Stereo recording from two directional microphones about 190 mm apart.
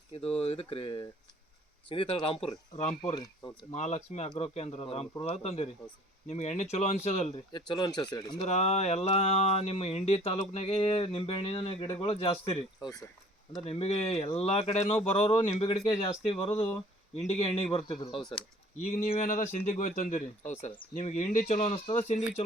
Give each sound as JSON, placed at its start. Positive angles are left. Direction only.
{"t": 0.2, "sound": "speech", "side_deg": 30}
{"t": 3.1, "sound": "speech", "side_deg": 20}
{"t": 3.7, "sound": "speech", "side_deg": 35}
{"t": 7.5, "sound": "speech", "side_deg": 20}
{"t": 8.4, "sound": "speech", "side_deg": 35}
{"t": 13.6, "sound": "speech", "side_deg": 30}
{"t": 18.1, "sound": "speech", "side_deg": 5}
{"t": 19.1, "sound": "speech", "side_deg": 40}